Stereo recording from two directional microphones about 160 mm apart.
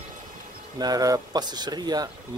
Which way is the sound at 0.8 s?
25° right (ahead or behind).